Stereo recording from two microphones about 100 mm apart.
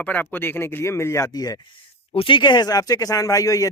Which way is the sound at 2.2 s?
55° left (ahead or behind).